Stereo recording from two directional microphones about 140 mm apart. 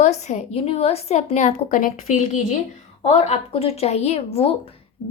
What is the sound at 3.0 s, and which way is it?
A woman's voice, 50° left (ahead or behind).